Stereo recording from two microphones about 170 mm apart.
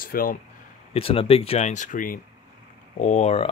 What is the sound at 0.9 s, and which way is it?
Speech, 35° left (ahead or behind).